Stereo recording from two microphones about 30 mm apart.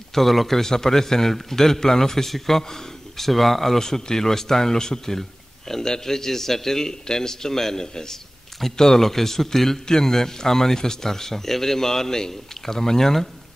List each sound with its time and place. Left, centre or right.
0.1 s a man's voice: centre
0.6 s a man's voice: centre